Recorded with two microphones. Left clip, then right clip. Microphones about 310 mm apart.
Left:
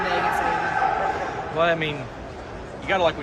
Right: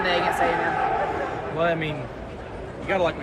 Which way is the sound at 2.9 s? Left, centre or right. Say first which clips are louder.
Left 2 dB; centre.